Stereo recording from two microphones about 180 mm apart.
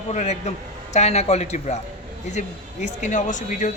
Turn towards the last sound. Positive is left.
turn(degrees=45)  # may be behind; listen again after turning